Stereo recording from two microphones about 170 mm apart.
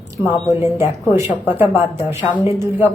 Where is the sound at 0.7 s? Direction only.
15° right (ahead or behind).